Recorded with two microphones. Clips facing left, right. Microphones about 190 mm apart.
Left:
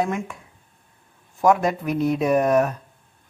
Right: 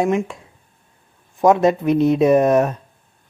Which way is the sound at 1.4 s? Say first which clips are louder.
Right 5 dB; 25° right (ahead or behind).